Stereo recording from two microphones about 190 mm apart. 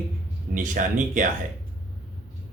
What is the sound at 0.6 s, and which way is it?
Speech, 45° right (ahead or behind).